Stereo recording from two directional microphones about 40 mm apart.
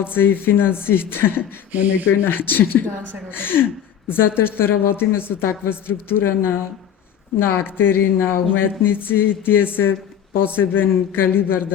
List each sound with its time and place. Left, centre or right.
0.0 s a woman's voice: left
1.7 s speech: right
2.2 s a woman's voice: left
7.3 s a woman's voice: left